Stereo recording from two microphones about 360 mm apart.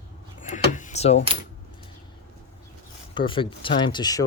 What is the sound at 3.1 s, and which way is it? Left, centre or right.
Speech, centre.